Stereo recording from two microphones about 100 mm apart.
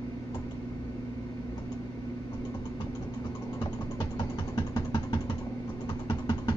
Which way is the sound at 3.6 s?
50° left (ahead or behind).